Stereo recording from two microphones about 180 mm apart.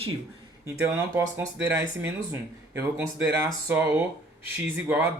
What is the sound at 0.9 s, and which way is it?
Speech, 15° right (ahead or behind).